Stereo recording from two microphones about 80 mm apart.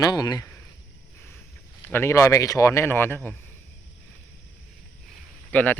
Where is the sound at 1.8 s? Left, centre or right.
Left.